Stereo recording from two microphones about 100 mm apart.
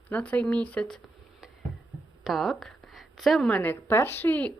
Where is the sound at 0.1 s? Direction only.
15° left (ahead or behind).